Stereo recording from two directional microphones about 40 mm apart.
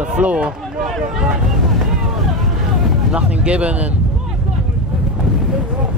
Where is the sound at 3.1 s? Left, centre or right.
Right.